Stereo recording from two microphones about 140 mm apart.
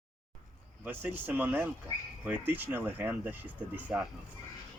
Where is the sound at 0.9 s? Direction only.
15° right (ahead or behind).